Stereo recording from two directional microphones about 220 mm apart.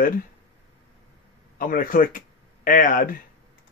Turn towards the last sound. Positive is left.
turn(degrees=40)  # may be behind; listen again after turning